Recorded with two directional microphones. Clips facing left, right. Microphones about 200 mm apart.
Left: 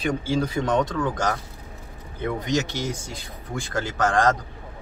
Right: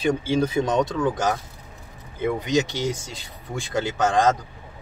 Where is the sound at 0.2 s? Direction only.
20° right (ahead or behind).